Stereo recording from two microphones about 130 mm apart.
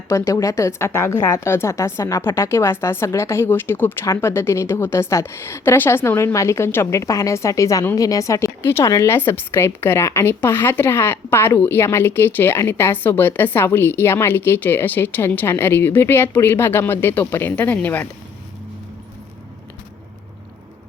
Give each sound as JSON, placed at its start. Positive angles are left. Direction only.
{"t": 0.1, "sound": "a woman's voice", "side_deg": 25}